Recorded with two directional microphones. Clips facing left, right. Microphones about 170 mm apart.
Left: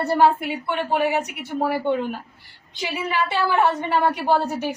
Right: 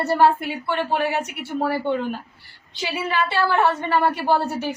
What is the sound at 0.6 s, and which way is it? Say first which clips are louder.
A woman's voice: left 1 dB; 15° left (ahead or behind).